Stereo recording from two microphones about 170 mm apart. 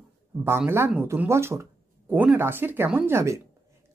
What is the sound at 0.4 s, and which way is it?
Speech, 15° right (ahead or behind).